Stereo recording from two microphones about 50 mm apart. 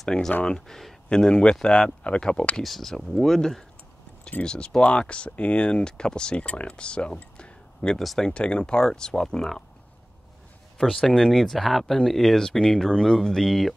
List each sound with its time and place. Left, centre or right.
0.0 s speech: centre
2.5 s speech: centre
7.3 s a sound: centre
8.3 s speech: left
10.8 s speech: centre